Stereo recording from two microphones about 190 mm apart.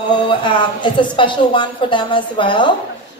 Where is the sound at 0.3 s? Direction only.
25° left (ahead or behind).